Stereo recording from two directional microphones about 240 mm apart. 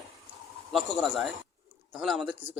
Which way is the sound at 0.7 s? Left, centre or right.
Centre.